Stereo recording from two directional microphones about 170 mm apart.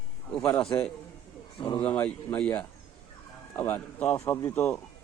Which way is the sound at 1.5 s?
25° left (ahead or behind).